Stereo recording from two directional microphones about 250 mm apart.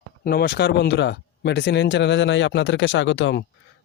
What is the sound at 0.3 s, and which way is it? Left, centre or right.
Speech, left.